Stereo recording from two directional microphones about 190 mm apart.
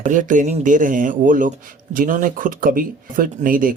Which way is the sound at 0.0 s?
40° right (ahead or behind).